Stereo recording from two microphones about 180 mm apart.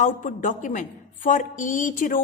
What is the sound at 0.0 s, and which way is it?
A woman's voice, 45° left (ahead or behind).